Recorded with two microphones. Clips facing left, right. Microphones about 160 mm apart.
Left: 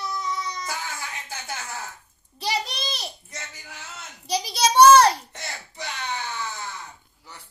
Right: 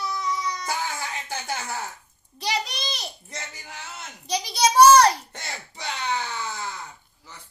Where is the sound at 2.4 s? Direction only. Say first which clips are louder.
Even; 5° left (ahead or behind).